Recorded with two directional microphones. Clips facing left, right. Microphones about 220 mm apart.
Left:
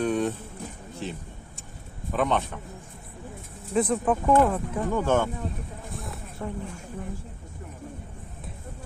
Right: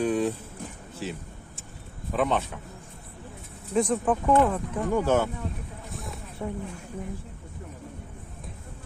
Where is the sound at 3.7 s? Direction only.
5° left (ahead or behind).